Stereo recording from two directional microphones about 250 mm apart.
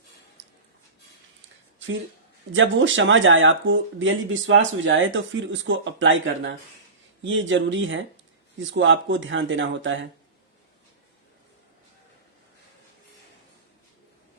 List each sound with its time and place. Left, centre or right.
2.5 s speech: right